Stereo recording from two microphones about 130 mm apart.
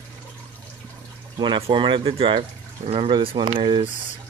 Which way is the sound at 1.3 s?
35° right (ahead or behind).